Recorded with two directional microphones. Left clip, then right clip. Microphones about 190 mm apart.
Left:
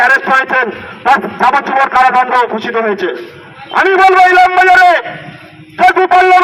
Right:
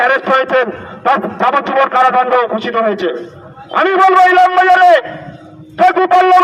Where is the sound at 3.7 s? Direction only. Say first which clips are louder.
Left 2 dB; 40° right (ahead or behind).